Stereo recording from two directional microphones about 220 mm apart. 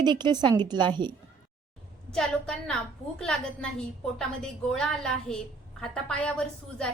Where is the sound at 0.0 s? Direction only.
20° right (ahead or behind).